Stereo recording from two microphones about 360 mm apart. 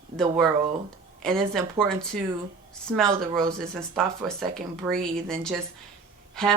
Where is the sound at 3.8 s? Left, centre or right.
Centre.